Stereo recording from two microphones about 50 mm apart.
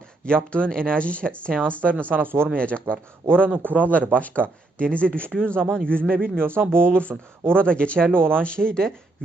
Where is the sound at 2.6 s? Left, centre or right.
Left.